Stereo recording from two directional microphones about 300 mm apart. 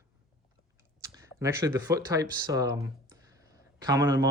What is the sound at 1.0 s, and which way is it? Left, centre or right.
Speech, centre.